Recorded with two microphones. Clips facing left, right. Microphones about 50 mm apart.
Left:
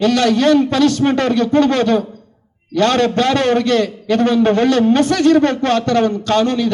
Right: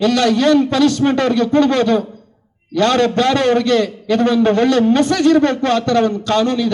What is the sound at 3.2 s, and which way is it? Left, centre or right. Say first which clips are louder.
A man's voice: even; left.